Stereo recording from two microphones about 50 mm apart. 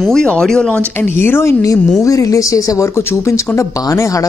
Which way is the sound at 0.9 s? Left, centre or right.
Left.